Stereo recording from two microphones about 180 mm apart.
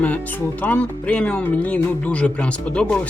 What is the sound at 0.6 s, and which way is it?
Speech, 10° left (ahead or behind).